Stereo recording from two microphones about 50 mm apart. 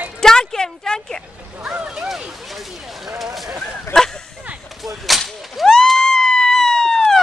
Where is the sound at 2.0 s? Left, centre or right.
Centre.